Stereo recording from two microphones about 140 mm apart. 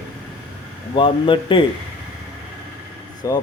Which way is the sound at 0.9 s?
35° left (ahead or behind).